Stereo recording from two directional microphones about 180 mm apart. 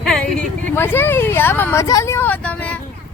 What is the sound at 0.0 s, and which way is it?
Speech, centre (ahead or behind).